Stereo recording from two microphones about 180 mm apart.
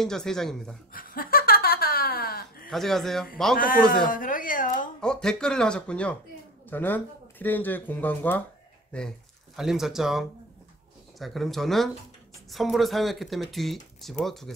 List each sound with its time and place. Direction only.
0.0 s speech: 5° left (ahead or behind)
0.9 s a sound: 55° left (ahead or behind)
2.7 s speech: centre (ahead or behind)
3.5 s a man's voice: 50° left (ahead or behind)
4.1 s a sound: 50° left (ahead or behind)
5.0 s speech: 5° left (ahead or behind)
9.6 s speech: centre (ahead or behind)